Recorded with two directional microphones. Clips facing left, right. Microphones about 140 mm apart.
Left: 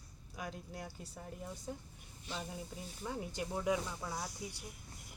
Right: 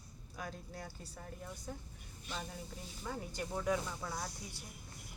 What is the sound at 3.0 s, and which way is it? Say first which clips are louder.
Speech: left 1 dB; 15° left (ahead or behind).